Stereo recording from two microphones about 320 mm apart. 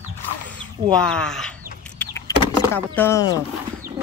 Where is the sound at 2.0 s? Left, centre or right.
Centre.